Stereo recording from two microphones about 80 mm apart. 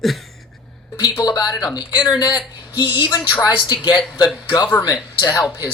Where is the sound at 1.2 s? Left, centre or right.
Left.